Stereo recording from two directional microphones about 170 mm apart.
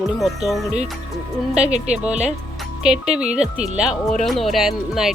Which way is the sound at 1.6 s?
40° right (ahead or behind).